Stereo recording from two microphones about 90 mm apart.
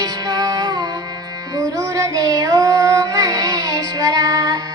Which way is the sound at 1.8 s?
40° right (ahead or behind).